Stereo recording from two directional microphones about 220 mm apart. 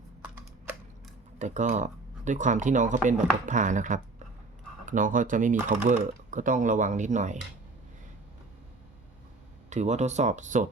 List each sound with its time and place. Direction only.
1.4 s speech: 35° right (ahead or behind)
9.6 s speech: 30° right (ahead or behind)